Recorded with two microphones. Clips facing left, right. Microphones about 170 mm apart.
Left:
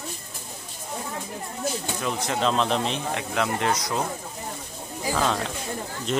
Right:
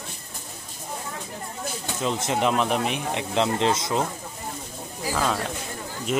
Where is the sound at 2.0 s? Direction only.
20° right (ahead or behind).